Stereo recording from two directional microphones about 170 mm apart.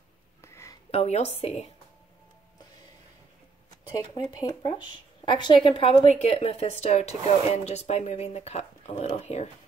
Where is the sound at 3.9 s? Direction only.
25° left (ahead or behind); by 9.5 s 40° left (ahead or behind).